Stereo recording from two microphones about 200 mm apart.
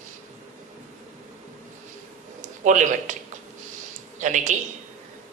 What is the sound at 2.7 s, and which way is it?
Speech, 40° right (ahead or behind).